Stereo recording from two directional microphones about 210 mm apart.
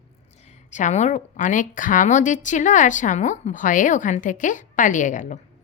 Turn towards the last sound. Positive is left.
turn(degrees=35)  # may be behind; listen again after turning